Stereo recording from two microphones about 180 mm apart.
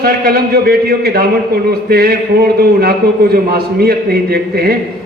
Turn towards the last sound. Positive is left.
turn(degrees=-60)  # may be behind; listen again after turning